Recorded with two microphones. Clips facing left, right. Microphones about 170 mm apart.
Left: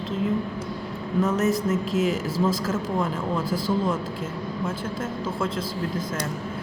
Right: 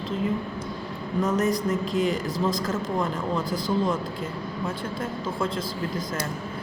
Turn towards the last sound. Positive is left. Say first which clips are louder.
# left 1 dB
turn(degrees=0)  # may be behind; listen again after turning